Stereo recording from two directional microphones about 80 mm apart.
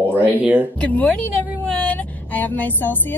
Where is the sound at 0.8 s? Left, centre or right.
Centre.